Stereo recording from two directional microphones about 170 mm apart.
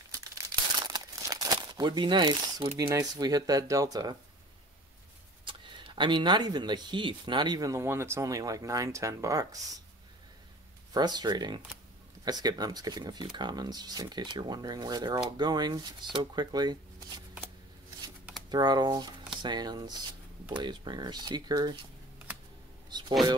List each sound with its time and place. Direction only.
0.1 s crumpling: 20° right (ahead or behind)
2.9 s speech: 20° right (ahead or behind)
5.4 s speech: 30° right (ahead or behind)
10.9 s speech: 25° right (ahead or behind)
18.5 s speech: 25° right (ahead or behind)
22.8 s a sound: 25° right (ahead or behind)